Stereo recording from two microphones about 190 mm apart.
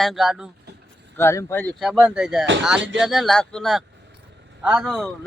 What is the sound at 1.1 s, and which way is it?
Speech, 15° left (ahead or behind).